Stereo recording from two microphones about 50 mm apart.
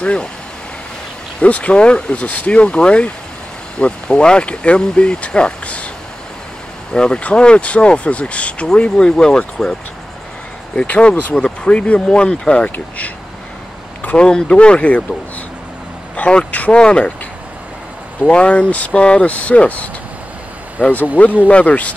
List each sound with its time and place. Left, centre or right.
0.0 s speech: left
1.4 s speech: left
6.9 s speech: centre
10.8 s speech: left
12.6 s speech: left
14.1 s speech: centre
16.2 s speech: left
18.2 s speech: centre
20.8 s speech: right
21.5 s speech: left